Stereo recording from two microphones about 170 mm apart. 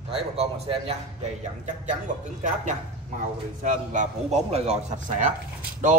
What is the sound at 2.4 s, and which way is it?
A man's voice, 45° right (ahead or behind).